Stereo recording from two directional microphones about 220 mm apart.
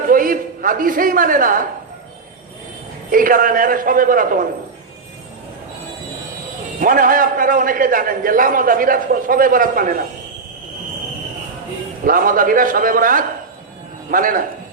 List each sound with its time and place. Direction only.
0.1 s a man's voice: 40° right (ahead or behind)
3.1 s a man's voice: 40° right (ahead or behind)
6.7 s a man's voice: 40° right (ahead or behind)
12.0 s a man's voice: 40° right (ahead or behind)